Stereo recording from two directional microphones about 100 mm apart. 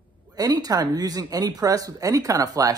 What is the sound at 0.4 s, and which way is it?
Speech, 40° right (ahead or behind).